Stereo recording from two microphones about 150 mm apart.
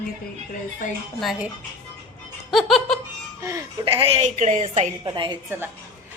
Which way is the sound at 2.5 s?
Centre (ahead or behind).